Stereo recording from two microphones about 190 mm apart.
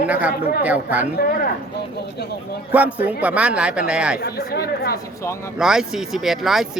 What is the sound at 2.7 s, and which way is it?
A man's voice, 5° right (ahead or behind).